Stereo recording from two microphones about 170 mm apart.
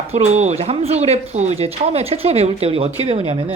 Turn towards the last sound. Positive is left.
turn(degrees=-30)  # may be behind; listen again after turning